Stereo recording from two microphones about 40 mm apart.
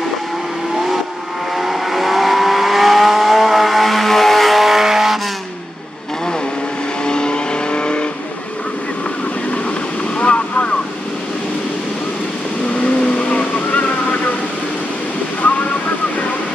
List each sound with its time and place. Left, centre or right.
1.6 s vehicle: centre
7.1 s vehicle: left
10.1 s a sound: left
12.7 s vehicle: left
13.3 s vehicle: left